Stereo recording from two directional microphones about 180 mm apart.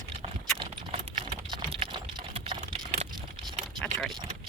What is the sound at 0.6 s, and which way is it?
Typing, 30° right (ahead or behind).